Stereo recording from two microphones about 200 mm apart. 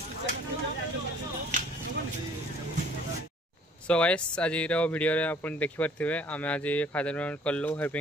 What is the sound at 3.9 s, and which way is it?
Speech, 5° left (ahead or behind).